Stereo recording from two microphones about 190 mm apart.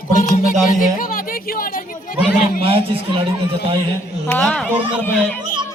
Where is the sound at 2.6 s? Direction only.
30° right (ahead or behind).